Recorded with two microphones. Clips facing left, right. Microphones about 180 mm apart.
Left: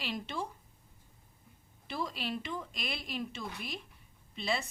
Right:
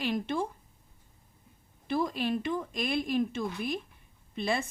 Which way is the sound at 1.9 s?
50° right (ahead or behind).